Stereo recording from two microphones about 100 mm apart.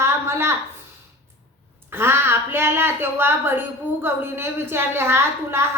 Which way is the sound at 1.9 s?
25° right (ahead or behind).